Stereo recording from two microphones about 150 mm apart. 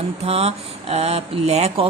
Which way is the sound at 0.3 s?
45° right (ahead or behind).